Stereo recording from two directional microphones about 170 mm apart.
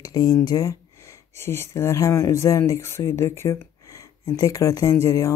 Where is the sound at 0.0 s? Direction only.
20° left (ahead or behind).